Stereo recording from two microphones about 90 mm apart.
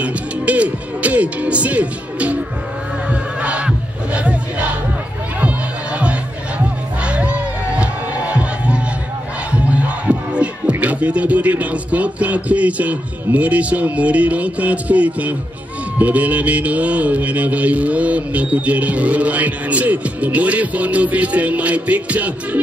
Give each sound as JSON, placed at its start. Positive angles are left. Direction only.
{"t": 0.0, "sound": "speech", "side_deg": -15}
{"t": 3.1, "sound": "crowd", "side_deg": -15}
{"t": 7.1, "sound": "music", "side_deg": -15}
{"t": 9.5, "sound": "a man's voice", "side_deg": -15}